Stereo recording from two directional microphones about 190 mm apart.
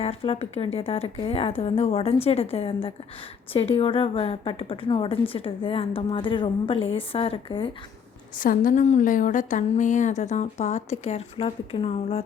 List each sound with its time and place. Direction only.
0.0 s a woman's voice: 30° left (ahead or behind)
8.4 s a woman's voice: 45° left (ahead or behind)